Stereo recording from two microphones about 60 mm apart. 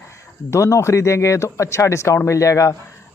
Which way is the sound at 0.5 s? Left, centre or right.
Left.